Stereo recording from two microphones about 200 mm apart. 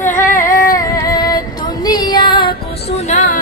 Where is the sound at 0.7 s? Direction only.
15° left (ahead or behind).